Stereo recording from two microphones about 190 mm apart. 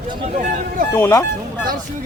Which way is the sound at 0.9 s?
15° left (ahead or behind).